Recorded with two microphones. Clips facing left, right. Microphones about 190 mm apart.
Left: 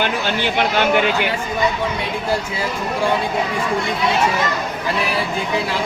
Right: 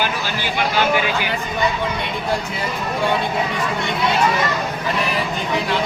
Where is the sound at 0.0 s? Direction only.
60° left (ahead or behind).